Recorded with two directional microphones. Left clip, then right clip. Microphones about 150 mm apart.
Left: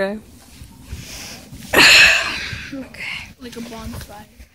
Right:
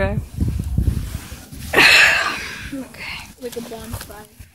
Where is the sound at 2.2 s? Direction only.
10° right (ahead or behind).